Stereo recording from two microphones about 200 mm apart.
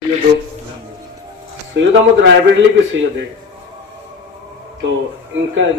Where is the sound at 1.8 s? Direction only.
65° right (ahead or behind).